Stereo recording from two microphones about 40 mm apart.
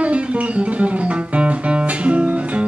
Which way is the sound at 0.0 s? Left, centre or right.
Right.